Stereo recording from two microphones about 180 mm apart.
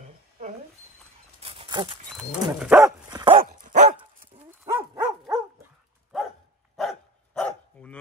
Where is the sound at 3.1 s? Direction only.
25° right (ahead or behind).